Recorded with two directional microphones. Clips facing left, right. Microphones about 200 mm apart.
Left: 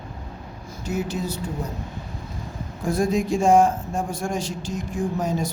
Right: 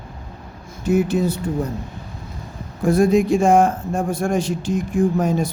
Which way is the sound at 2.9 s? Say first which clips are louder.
Right 7 dB; 60° right (ahead or behind).